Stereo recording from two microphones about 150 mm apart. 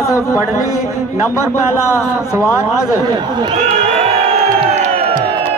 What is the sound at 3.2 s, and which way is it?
Speech, 30° right (ahead or behind).